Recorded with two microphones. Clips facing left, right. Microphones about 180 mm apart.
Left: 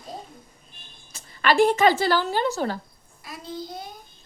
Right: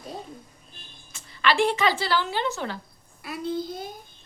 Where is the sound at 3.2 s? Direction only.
60° right (ahead or behind).